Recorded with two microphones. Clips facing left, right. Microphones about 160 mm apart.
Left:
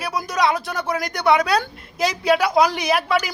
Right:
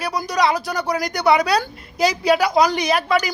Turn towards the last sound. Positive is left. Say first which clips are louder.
# right 1 dB
turn(degrees=5)  # may be behind; listen again after turning